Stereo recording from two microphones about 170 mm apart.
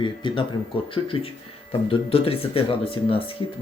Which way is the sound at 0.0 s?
30° left (ahead or behind).